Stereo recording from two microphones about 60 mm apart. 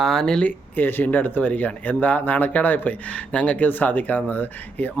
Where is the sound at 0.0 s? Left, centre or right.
Centre.